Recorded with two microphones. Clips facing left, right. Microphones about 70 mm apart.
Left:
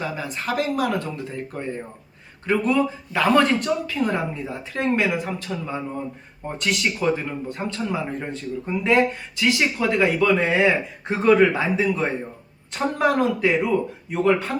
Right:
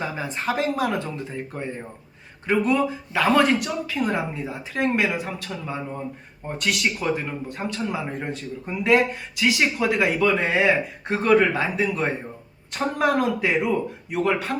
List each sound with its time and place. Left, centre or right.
0.0 s speech: right
3.1 s speech: centre
13.4 s a man's voice: centre